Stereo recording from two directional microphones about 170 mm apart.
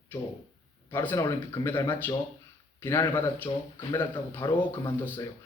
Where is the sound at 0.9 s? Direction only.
10° left (ahead or behind).